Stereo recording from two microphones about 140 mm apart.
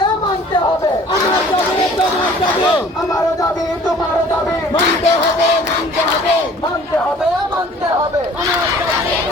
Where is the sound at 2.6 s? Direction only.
30° left (ahead or behind).